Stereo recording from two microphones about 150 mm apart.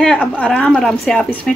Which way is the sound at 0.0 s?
5° left (ahead or behind).